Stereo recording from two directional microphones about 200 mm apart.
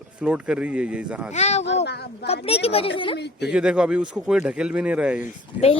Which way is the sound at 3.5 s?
5° right (ahead or behind).